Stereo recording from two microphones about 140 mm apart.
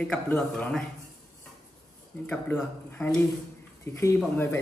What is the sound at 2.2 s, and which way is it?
Speech, 15° left (ahead or behind).